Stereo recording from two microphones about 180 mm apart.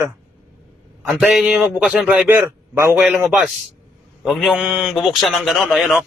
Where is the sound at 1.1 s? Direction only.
5° right (ahead or behind).